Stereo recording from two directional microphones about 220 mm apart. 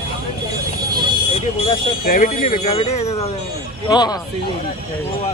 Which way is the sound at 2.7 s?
25° left (ahead or behind).